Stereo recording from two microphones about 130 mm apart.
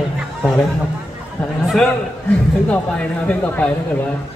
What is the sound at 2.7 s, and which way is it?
Speech, 10° left (ahead or behind).